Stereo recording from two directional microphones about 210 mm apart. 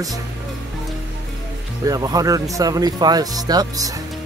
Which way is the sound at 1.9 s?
15° right (ahead or behind).